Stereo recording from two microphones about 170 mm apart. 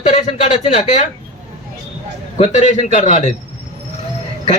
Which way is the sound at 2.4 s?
45° left (ahead or behind).